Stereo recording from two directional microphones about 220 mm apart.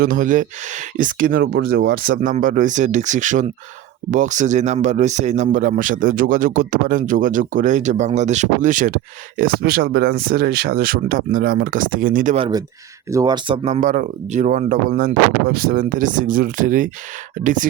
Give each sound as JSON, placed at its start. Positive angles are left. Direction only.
{"t": 0.0, "sound": "speech", "side_deg": -40}
{"t": 13.1, "sound": "speech", "side_deg": -15}